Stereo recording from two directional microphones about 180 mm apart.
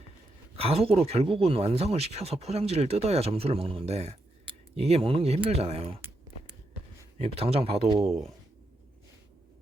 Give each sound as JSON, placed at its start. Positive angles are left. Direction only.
{"t": 0.5, "sound": "speech", "side_deg": -35}
{"t": 7.2, "sound": "speech", "side_deg": -30}